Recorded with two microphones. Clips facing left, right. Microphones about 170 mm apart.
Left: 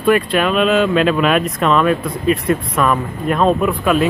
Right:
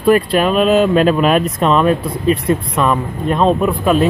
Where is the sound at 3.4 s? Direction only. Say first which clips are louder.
Right 1 dB; centre (ahead or behind).